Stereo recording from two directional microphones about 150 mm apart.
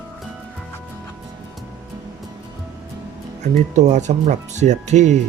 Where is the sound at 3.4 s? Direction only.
50° right (ahead or behind).